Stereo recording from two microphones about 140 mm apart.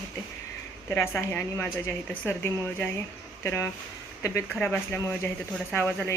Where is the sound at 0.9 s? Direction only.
15° left (ahead or behind).